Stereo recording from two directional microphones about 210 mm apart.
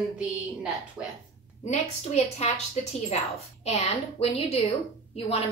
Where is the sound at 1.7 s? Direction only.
30° left (ahead or behind).